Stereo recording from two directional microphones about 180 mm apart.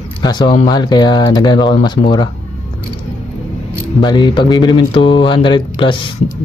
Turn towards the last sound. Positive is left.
turn(degrees=30)  # may be behind; listen again after turning